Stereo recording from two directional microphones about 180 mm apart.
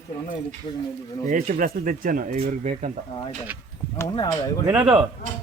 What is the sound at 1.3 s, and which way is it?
Speech, 45° right (ahead or behind).